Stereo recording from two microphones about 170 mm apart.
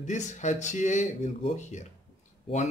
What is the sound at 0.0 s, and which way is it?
Speech, 45° left (ahead or behind).